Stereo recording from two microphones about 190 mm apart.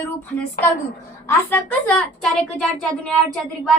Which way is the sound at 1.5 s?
10° left (ahead or behind).